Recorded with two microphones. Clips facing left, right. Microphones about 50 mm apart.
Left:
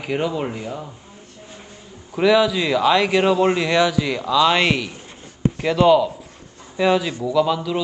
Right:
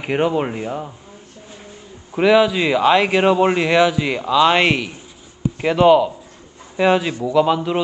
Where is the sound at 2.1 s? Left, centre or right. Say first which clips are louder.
Right 2 dB; right.